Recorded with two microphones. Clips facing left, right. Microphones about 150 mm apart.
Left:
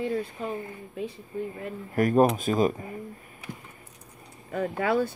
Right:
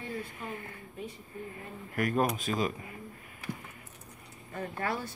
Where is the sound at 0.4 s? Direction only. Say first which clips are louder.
Left 8 dB; 25° left (ahead or behind).